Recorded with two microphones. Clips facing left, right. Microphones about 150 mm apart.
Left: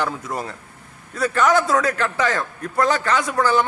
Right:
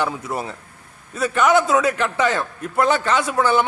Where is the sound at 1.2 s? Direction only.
15° right (ahead or behind).